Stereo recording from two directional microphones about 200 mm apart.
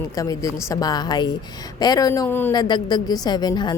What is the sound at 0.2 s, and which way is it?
A woman's voice, 15° left (ahead or behind).